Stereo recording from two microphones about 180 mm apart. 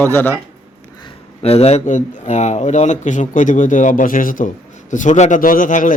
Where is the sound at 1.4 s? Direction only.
35° left (ahead or behind).